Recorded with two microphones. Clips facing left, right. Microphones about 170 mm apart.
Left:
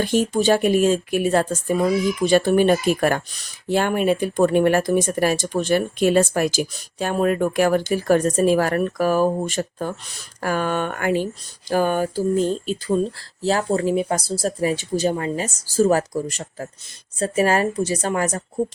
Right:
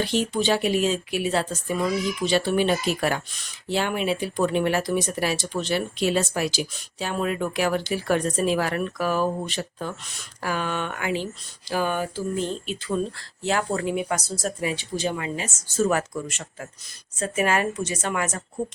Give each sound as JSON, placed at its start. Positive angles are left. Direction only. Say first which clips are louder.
{"t": 0.0, "sound": "speech", "louder": "left 5 dB", "side_deg": 45}